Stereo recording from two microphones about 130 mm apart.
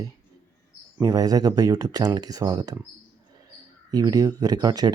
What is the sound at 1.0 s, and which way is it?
Speech, 30° right (ahead or behind).